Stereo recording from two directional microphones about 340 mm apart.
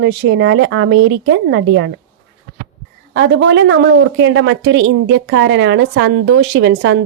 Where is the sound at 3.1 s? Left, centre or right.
Right.